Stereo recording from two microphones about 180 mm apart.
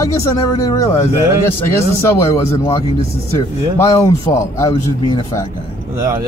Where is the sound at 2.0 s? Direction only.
15° left (ahead or behind).